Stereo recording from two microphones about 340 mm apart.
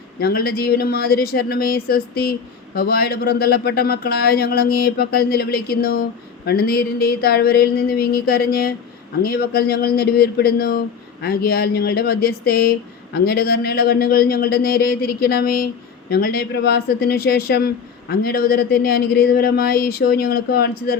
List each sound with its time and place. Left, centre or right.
0.2 s speech: left